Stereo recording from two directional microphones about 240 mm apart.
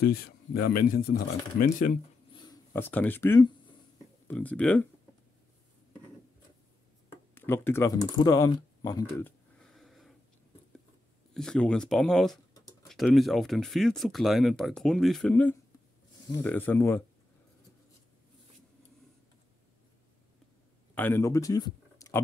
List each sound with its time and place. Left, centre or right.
0.0 s speech: left
2.3 s speech: centre
7.3 s speech: centre
11.3 s speech: centre
20.9 s speech: centre